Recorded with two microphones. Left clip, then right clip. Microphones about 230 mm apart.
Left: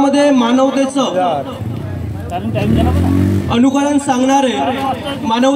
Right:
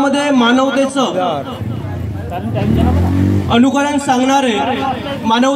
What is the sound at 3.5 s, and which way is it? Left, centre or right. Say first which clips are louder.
A man's voice: right 1 dB; right.